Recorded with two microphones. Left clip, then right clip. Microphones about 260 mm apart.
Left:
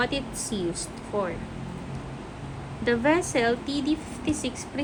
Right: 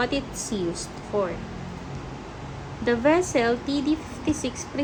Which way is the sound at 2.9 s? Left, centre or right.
Centre.